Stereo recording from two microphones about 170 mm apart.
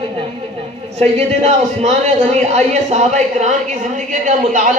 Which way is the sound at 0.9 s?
40° right (ahead or behind).